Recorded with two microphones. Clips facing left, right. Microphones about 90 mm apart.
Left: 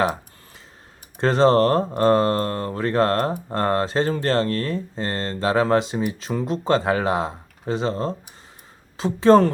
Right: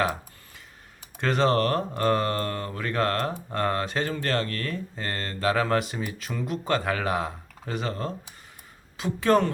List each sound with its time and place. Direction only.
1.2 s speech: 30° left (ahead or behind)